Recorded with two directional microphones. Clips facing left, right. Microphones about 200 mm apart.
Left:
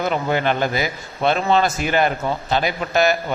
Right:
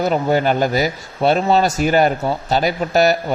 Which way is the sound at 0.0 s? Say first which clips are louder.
Right 4 dB; 40° right (ahead or behind).